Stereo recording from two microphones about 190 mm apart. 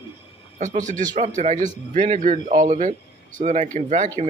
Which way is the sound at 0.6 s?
40° right (ahead or behind).